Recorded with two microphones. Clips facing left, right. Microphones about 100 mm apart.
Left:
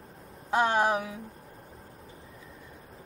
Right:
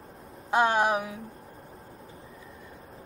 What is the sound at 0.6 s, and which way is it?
Speech, 15° right (ahead or behind).